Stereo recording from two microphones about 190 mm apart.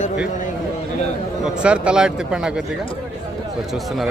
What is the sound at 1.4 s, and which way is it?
Speech, 5° right (ahead or behind).